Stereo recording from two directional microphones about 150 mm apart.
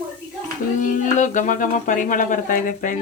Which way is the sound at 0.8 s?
60° left (ahead or behind).